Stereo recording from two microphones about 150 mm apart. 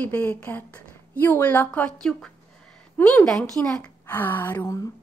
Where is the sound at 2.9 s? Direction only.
10° left (ahead or behind).